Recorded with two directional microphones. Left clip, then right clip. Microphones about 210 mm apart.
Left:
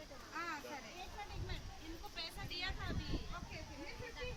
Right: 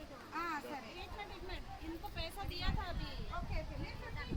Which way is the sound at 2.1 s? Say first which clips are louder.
Left 2 dB; 35° right (ahead or behind).